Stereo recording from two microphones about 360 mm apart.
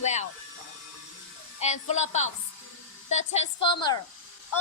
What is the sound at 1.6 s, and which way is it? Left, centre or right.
A woman's voice, centre.